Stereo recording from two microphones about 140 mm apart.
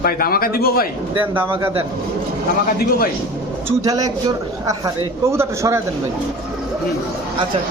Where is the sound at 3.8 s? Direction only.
25° right (ahead or behind).